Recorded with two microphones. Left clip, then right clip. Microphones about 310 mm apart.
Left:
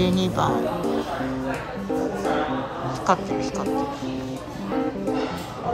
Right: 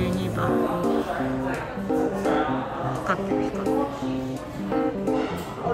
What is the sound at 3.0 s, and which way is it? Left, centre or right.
Speech, centre.